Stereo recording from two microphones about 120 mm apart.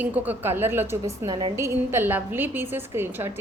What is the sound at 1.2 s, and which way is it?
Speech, 40° right (ahead or behind).